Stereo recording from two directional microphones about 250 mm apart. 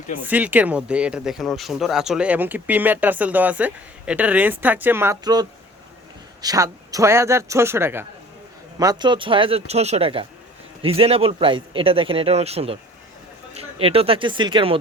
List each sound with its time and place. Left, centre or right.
0.2 s speech: centre